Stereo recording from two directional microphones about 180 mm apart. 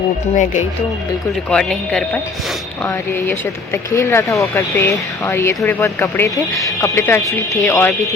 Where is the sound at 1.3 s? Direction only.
5° left (ahead or behind).